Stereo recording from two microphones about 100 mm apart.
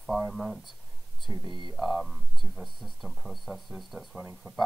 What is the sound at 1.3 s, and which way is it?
Speech, 50° left (ahead or behind).